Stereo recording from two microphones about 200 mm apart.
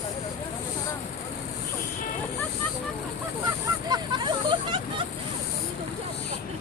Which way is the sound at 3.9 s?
25° right (ahead or behind).